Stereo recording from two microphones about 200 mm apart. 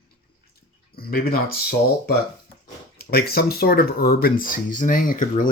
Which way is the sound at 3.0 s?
50° left (ahead or behind).